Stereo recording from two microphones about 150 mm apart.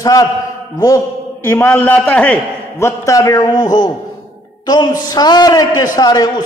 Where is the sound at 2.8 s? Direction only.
20° left (ahead or behind).